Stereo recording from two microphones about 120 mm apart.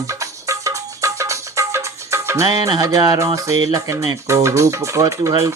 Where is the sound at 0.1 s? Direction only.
25° right (ahead or behind).